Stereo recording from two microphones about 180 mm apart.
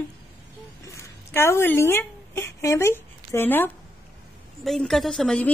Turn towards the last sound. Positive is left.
turn(degrees=5)  # may be behind; listen again after turning